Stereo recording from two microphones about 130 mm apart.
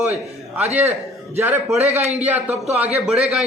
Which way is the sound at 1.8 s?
60° right (ahead or behind).